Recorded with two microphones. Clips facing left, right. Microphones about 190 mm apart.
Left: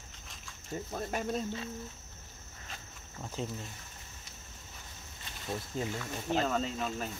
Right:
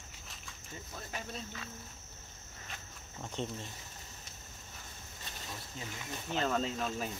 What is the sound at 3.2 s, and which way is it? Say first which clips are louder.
Speech: left 1 dB; centre (ahead or behind).